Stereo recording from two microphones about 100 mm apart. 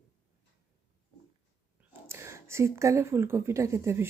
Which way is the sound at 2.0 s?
25° right (ahead or behind).